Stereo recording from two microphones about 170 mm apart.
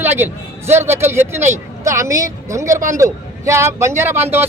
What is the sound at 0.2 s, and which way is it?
A man's voice, 15° right (ahead or behind).